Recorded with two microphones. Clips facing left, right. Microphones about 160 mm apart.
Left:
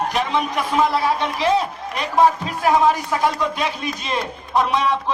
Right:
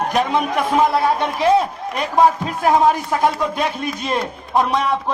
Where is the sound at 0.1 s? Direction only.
50° right (ahead or behind).